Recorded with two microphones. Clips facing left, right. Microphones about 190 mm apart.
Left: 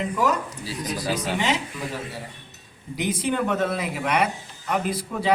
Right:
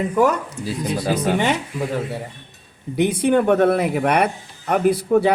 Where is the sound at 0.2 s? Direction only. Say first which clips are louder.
Right 7 dB; 55° right (ahead or behind).